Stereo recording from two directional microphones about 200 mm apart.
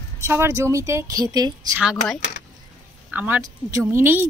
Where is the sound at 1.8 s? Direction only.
5° right (ahead or behind).